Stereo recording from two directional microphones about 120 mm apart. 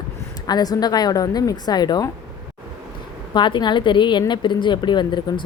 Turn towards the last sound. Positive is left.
turn(degrees=40)  # may be behind; listen again after turning